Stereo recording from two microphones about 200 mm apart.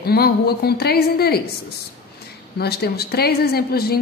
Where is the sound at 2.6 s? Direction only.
55° left (ahead or behind).